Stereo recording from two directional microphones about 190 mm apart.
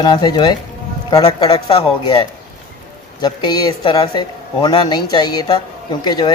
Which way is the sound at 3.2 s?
20° left (ahead or behind).